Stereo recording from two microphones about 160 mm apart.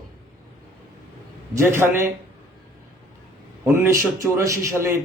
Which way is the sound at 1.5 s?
15° right (ahead or behind).